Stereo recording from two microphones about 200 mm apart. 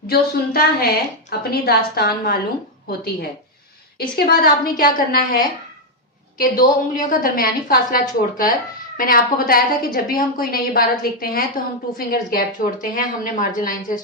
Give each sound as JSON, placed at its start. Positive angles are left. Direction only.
{"t": 0.1, "sound": "a woman's voice", "side_deg": 50}
{"t": 3.9, "sound": "a woman's voice", "side_deg": 45}
{"t": 6.4, "sound": "a woman's voice", "side_deg": 45}